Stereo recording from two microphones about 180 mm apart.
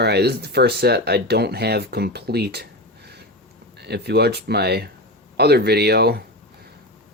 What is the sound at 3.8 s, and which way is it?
Speech, 65° right (ahead or behind).